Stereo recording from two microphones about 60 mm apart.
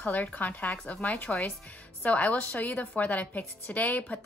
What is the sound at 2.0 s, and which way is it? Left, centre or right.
A woman's voice, left.